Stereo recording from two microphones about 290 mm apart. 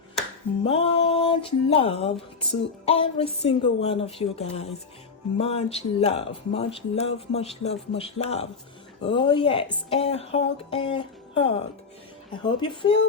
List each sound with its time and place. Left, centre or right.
0.6 s speech: centre